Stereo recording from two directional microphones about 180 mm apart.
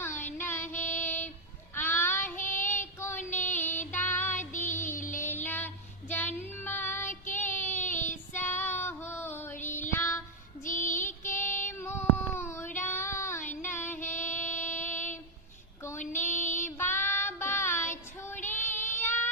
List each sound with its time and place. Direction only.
0.0 s child singing: 10° left (ahead or behind)
3.2 s child singing: 45° left (ahead or behind)
3.9 s child singing: 10° left (ahead or behind)
4.4 s music: 45° left (ahead or behind)
5.2 s child singing: 10° left (ahead or behind)
8.4 s female singing: 10° left (ahead or behind)
9.9 s child singing: 15° left (ahead or behind)
13.7 s female singing: 15° left (ahead or behind)
14.1 s child singing: 10° left (ahead or behind)
16.4 s child singing: 10° left (ahead or behind)